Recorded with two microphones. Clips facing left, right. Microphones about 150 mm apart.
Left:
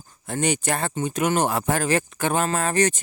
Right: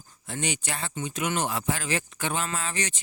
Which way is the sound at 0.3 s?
50° left (ahead or behind).